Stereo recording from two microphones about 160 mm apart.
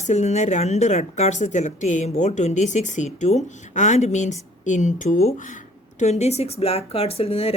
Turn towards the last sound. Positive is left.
turn(degrees=40)  # may be behind; listen again after turning